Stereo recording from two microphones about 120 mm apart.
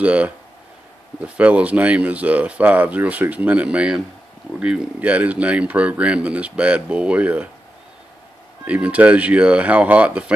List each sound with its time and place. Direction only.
0.0 s speech: 10° right (ahead or behind)
8.6 s speech: 10° right (ahead or behind)